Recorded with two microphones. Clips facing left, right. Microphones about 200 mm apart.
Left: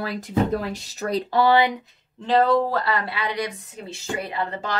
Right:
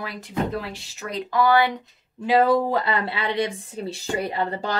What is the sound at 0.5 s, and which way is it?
Speech, 40° left (ahead or behind).